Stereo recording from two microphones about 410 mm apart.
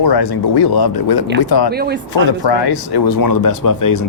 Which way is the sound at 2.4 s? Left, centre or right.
Left.